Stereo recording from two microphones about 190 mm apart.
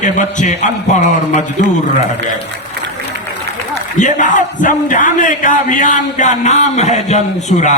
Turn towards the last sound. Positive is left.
turn(degrees=35)  # may be behind; listen again after turning